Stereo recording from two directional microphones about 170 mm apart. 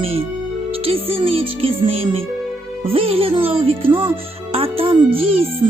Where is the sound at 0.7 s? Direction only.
35° right (ahead or behind).